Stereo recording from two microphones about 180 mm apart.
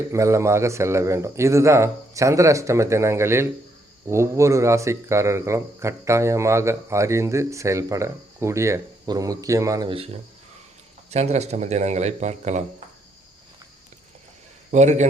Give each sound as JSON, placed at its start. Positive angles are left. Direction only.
{"t": 0.1, "sound": "speech", "side_deg": -15}
{"t": 11.1, "sound": "speech", "side_deg": -35}
{"t": 14.7, "sound": "speech", "side_deg": -40}